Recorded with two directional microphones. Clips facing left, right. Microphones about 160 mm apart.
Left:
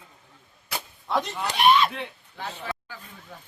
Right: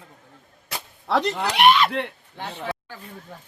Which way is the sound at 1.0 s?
85° right.